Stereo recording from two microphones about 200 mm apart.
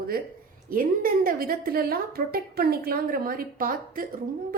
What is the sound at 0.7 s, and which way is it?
A woman's voice, 45° right (ahead or behind).